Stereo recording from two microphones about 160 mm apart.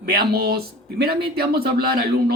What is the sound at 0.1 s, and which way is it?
Speech, 80° right.